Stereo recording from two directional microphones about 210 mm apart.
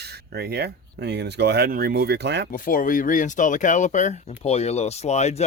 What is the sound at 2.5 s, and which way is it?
Speech, 40° left (ahead or behind).